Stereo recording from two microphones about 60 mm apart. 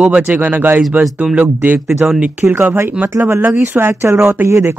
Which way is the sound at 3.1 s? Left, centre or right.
Right.